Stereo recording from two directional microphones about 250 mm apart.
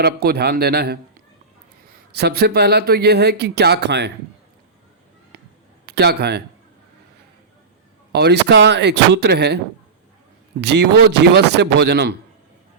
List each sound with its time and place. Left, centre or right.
0.0 s speech: right
2.1 s speech: right
5.8 s speech: right
8.1 s speech: right
10.6 s speech: right